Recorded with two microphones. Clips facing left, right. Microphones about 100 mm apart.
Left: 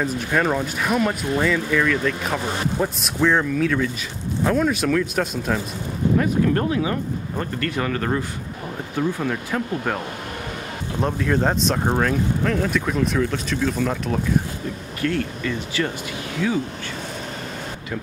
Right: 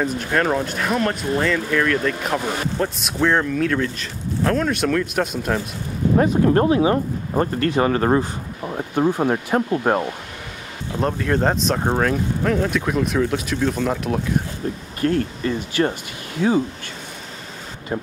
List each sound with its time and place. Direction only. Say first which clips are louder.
0.0 s speech: right 1 dB; centre (ahead or behind)
6.2 s speech: right 4 dB; 30° right (ahead or behind)
11.0 s speech: right 1 dB; centre (ahead or behind)
15.0 s speech: right 3 dB; 40° right (ahead or behind)